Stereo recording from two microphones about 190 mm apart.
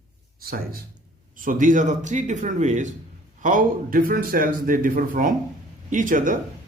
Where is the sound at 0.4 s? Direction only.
50° right (ahead or behind).